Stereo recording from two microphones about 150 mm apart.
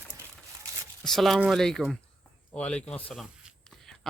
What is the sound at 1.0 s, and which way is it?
Speech, centre (ahead or behind).